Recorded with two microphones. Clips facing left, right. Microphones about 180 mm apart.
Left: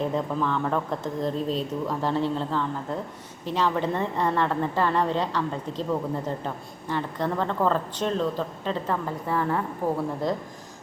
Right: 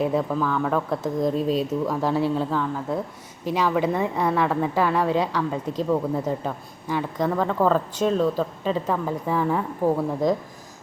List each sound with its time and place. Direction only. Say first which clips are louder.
0.0 s speech: right 3 dB; 5° right (ahead or behind)